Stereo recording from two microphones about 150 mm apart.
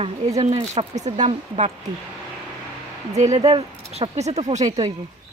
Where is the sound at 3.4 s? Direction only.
35° right (ahead or behind).